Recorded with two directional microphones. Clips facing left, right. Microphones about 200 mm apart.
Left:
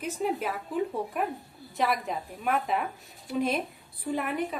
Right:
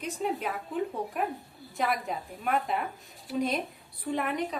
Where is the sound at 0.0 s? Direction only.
5° left (ahead or behind).